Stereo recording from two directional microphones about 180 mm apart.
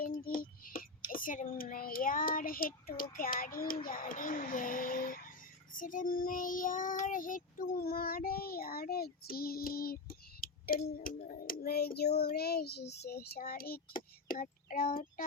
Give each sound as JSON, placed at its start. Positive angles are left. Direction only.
{"t": 0.0, "sound": "a sound", "side_deg": 50}
{"t": 1.1, "sound": "speech", "side_deg": 50}
{"t": 5.7, "sound": "child singing", "side_deg": 50}